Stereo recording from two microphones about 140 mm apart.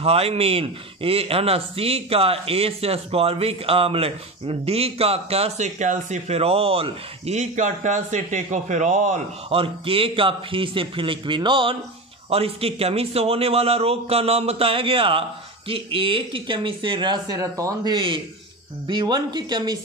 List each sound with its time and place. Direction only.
0.0 s speech: 45° right (ahead or behind); by 9.2 s 60° right (ahead or behind)
9.5 s speech: 40° right (ahead or behind)